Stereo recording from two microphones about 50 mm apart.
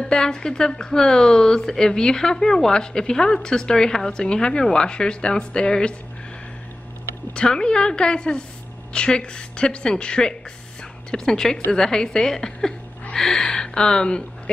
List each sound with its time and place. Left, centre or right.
0.0 s speech: centre
7.3 s a woman's voice: centre